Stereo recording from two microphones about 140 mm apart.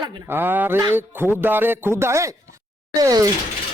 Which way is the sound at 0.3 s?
15° right (ahead or behind).